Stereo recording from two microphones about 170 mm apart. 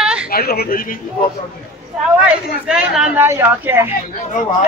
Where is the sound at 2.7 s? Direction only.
5° right (ahead or behind).